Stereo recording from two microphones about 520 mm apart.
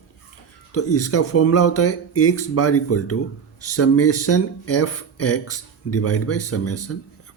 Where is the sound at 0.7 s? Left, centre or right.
Left.